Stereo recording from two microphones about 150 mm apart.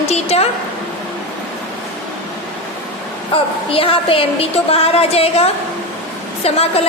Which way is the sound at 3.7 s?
40° left (ahead or behind).